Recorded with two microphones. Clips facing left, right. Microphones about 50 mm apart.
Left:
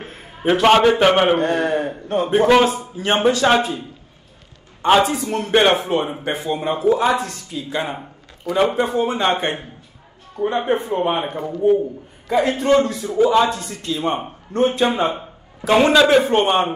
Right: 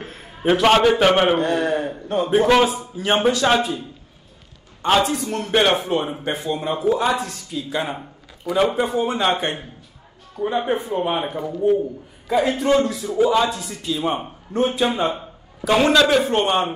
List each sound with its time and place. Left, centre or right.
0.0 s a man's voice: centre
1.4 s a man's voice: left
1.7 s a man's voice: centre
2.3 s speech: centre
4.8 s a man's voice: centre
14.9 s a man's voice: centre